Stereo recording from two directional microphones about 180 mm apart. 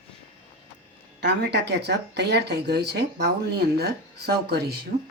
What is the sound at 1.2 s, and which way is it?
Speech, 70° right (ahead or behind).